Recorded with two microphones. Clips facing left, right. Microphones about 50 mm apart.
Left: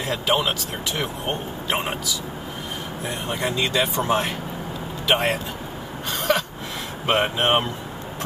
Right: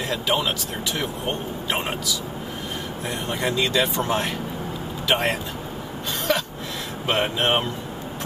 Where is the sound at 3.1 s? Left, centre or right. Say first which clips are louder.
Right 1 dB; centre.